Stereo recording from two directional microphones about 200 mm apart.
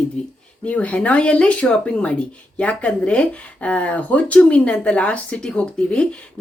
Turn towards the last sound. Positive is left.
turn(degrees=5)  # may be behind; listen again after turning